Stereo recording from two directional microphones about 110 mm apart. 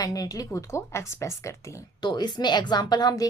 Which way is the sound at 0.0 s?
35° left (ahead or behind).